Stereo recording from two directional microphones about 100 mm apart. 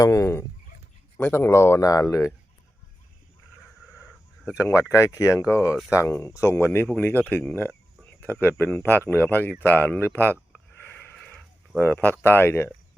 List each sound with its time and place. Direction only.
0.0 s speech: 30° left (ahead or behind)
4.5 s speech: 30° left (ahead or behind)
10.8 s a sound: 20° left (ahead or behind)
11.8 s speech: 20° left (ahead or behind)